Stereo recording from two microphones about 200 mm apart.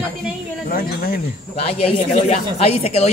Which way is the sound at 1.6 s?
30° left (ahead or behind).